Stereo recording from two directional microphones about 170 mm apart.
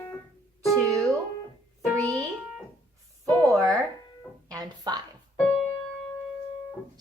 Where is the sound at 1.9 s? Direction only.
5° left (ahead or behind).